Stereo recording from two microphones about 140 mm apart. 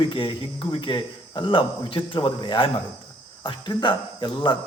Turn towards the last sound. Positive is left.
turn(degrees=35)  # may be behind; listen again after turning